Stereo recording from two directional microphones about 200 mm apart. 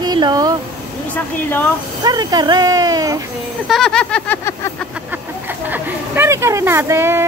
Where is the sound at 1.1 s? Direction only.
10° left (ahead or behind).